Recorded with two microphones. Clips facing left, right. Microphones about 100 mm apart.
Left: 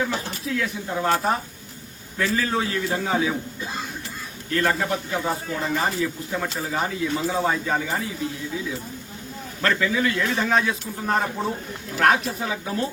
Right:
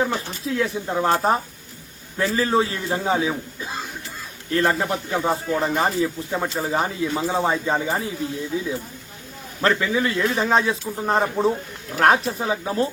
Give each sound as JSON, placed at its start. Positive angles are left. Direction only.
{"t": 0.0, "sound": "a man's voice", "side_deg": -30}
{"t": 4.5, "sound": "a man's voice", "side_deg": -30}
{"t": 9.6, "sound": "a man's voice", "side_deg": -25}